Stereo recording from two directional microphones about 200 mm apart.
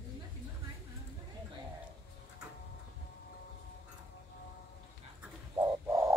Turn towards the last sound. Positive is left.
turn(degrees=-20)  # may be behind; listen again after turning